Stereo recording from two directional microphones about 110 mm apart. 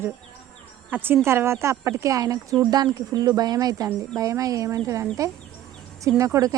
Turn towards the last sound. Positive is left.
turn(degrees=-30)  # may be behind; listen again after turning